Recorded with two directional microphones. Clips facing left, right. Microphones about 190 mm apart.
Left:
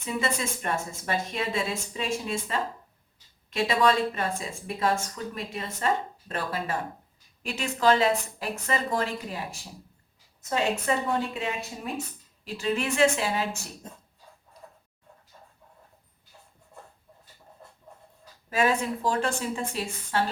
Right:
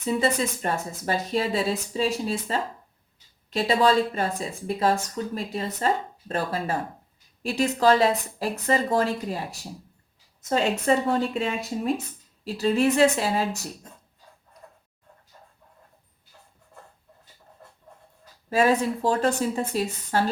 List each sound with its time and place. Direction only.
0.0 s a woman's voice: 35° right (ahead or behind)
18.5 s a woman's voice: 35° right (ahead or behind)